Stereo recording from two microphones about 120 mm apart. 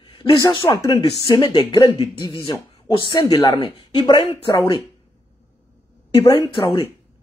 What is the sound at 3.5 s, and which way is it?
Speech, 55° left (ahead or behind).